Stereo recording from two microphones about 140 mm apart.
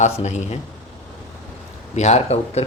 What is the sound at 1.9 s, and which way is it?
Speech, 55° left (ahead or behind).